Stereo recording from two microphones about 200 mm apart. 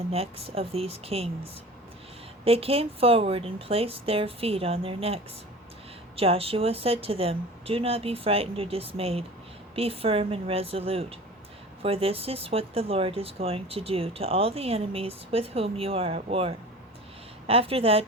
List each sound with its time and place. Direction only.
0.1 s speech: 30° right (ahead or behind)
2.4 s speech: 30° right (ahead or behind)